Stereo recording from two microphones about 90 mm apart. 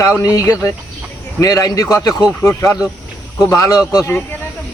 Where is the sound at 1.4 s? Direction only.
40° left (ahead or behind).